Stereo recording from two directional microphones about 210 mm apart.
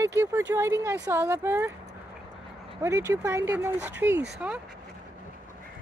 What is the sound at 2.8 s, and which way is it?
Speech, 15° right (ahead or behind).